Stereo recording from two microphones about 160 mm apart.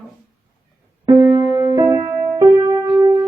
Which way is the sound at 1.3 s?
30° right (ahead or behind).